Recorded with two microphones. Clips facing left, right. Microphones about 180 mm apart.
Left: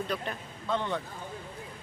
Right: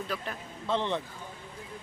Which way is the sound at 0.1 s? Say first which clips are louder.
Even; 5° right (ahead or behind).